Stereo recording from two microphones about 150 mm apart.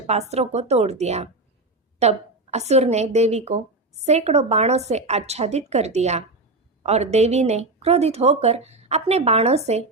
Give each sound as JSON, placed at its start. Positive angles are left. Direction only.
{"t": 0.1, "sound": "speech", "side_deg": -45}